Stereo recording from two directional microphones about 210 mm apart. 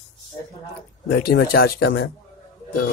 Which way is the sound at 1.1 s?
50° left (ahead or behind).